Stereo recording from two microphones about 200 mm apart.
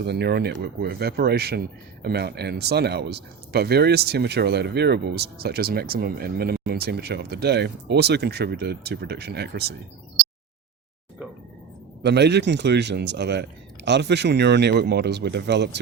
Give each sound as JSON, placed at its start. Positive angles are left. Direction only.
{"t": 0.0, "sound": "speech", "side_deg": -55}
{"t": 12.0, "sound": "speech", "side_deg": -55}